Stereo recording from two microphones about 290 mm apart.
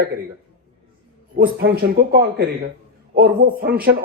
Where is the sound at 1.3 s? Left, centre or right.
Right.